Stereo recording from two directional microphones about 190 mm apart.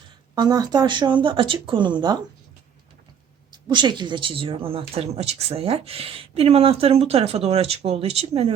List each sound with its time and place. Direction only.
0.3 s speech: 20° right (ahead or behind)
3.5 s speech: 25° right (ahead or behind)